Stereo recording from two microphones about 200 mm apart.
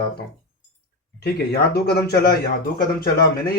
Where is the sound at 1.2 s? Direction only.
55° left (ahead or behind).